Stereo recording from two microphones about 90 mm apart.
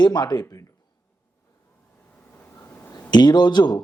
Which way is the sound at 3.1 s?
50° left (ahead or behind).